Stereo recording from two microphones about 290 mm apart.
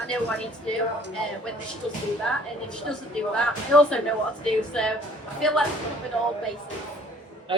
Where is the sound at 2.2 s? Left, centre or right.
Centre.